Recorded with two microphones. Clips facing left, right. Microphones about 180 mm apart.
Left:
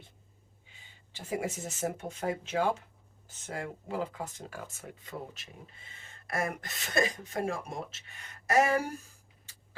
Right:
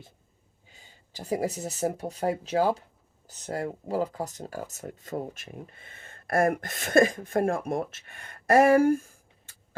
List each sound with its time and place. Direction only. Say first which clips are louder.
0.7 s speech: right 5 dB; 40° right (ahead or behind)